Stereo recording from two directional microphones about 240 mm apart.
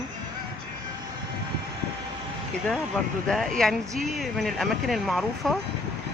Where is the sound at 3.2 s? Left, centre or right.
Centre.